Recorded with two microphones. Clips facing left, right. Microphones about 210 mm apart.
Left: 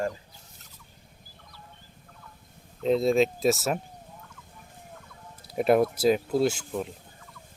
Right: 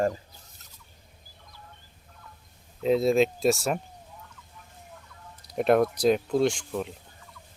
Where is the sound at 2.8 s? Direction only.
Centre (ahead or behind).